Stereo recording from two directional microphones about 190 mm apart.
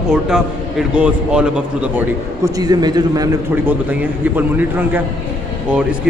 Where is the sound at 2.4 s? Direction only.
20° right (ahead or behind).